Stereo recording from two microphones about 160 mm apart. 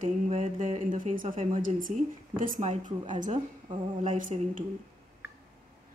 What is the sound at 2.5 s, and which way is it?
Speech, 50° right (ahead or behind).